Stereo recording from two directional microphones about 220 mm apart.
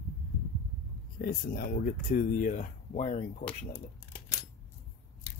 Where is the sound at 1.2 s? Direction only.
40° left (ahead or behind).